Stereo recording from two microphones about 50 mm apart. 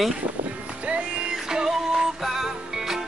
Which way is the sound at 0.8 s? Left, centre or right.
Right.